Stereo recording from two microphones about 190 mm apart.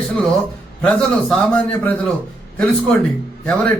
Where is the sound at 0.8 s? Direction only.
5° left (ahead or behind).